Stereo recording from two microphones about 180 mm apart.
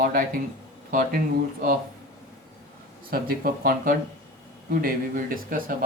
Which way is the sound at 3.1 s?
55° right (ahead or behind).